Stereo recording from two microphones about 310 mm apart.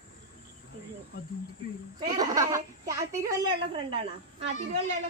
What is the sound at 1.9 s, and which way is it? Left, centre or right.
Speech, centre.